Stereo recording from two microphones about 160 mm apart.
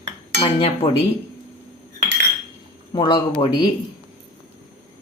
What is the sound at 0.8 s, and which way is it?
Speech, 20° left (ahead or behind).